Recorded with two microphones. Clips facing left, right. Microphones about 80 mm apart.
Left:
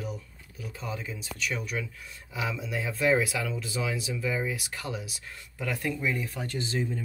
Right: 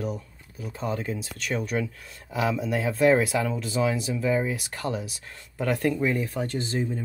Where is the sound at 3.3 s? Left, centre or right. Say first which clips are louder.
Right 6 dB; right.